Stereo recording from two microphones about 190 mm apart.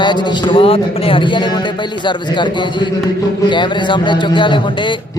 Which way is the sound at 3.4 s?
25° left (ahead or behind).